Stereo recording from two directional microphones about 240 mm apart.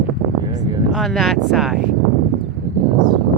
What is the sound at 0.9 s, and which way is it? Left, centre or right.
Speech, centre.